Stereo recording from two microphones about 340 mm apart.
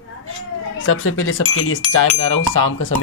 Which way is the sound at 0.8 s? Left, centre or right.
Left.